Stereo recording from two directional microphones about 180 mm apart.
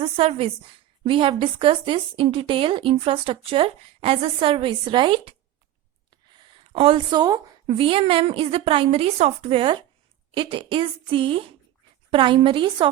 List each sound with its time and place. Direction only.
0.0 s a woman's voice: 35° right (ahead or behind)
6.2 s a sound: 25° right (ahead or behind)
7.7 s a woman's voice: 30° right (ahead or behind)